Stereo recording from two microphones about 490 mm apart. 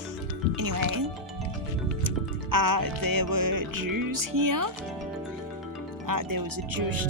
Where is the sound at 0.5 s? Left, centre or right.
Right.